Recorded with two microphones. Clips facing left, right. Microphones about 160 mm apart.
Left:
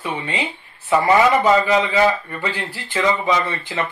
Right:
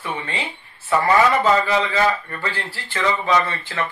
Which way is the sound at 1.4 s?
15° left (ahead or behind).